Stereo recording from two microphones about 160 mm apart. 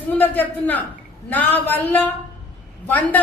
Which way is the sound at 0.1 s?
10° left (ahead or behind).